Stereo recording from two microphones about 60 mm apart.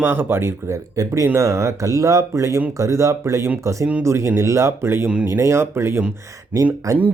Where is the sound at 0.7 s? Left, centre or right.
Right.